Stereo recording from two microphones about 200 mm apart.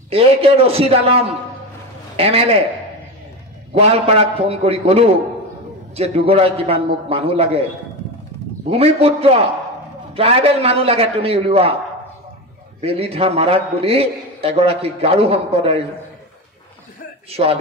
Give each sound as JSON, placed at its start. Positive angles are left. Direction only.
{"t": 0.1, "sound": "a man's voice", "side_deg": -30}
{"t": 3.7, "sound": "a man's voice", "side_deg": -30}
{"t": 8.6, "sound": "a man's voice", "side_deg": -30}
{"t": 12.8, "sound": "a man's voice", "side_deg": -30}
{"t": 17.3, "sound": "a man's voice", "side_deg": -30}